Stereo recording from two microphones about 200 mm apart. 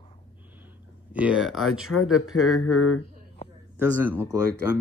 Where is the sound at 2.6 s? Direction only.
Centre (ahead or behind).